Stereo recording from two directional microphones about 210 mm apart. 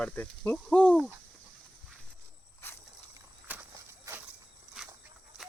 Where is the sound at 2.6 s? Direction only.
10° left (ahead or behind).